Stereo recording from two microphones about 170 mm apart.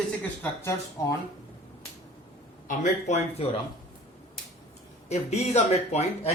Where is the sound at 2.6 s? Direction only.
45° left (ahead or behind).